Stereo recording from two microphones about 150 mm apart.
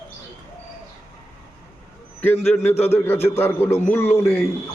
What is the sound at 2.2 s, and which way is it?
A man's voice, 10° left (ahead or behind).